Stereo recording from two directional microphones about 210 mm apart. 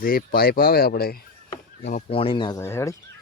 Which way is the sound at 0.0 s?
45° left (ahead or behind).